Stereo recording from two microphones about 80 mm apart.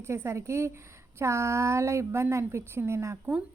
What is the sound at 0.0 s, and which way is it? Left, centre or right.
Speech, right.